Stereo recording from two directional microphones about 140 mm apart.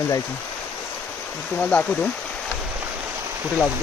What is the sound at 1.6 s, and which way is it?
Speech, 10° left (ahead or behind).